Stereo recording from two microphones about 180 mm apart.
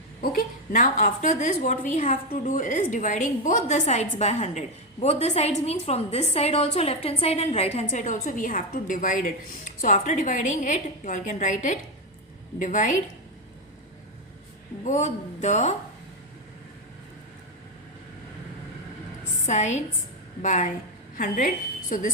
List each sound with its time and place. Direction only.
0.2 s a woman's voice: 50° left (ahead or behind)
14.8 s speech: 40° left (ahead or behind)
19.5 s a woman's voice: 40° left (ahead or behind)